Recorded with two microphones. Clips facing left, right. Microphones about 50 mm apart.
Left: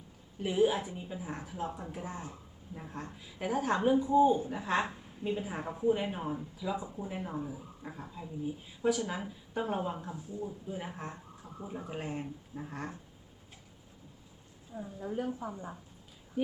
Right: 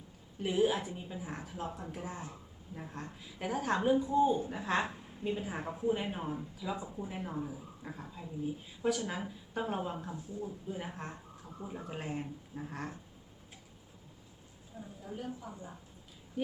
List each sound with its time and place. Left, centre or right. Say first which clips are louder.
0.4 s speech: left 2 dB; centre
14.8 s a woman's voice: left 7 dB; left